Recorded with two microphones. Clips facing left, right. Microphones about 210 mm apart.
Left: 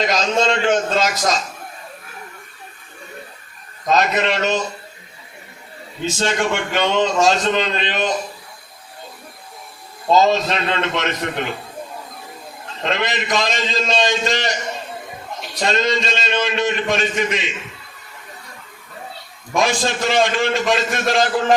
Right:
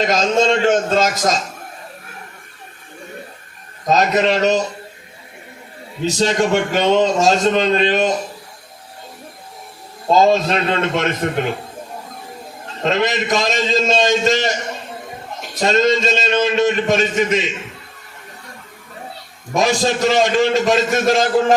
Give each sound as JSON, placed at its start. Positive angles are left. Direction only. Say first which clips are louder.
{"t": 0.1, "sound": "a man's voice", "louder": "right 3 dB", "side_deg": -45}
{"t": 3.8, "sound": "a man's voice", "louder": "right 3 dB", "side_deg": -40}
{"t": 6.1, "sound": "a man's voice", "louder": "right 4 dB", "side_deg": -40}
{"t": 10.2, "sound": "a man's voice", "louder": "right 3 dB", "side_deg": -45}
{"t": 12.8, "sound": "a man's voice", "louder": "right 4 dB", "side_deg": -45}
{"t": 19.5, "sound": "a man's voice", "louder": "right 3 dB", "side_deg": -40}